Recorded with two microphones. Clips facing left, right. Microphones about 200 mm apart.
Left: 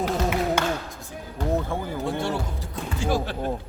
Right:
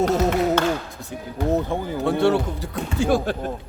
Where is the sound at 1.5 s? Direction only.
20° right (ahead or behind).